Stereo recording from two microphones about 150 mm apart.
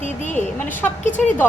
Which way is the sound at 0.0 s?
55° left (ahead or behind).